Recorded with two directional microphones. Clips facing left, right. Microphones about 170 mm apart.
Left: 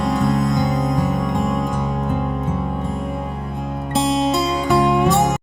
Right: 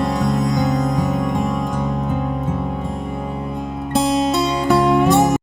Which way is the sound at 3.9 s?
Centre (ahead or behind).